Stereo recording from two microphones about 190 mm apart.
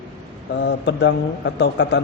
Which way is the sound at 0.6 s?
65° left (ahead or behind).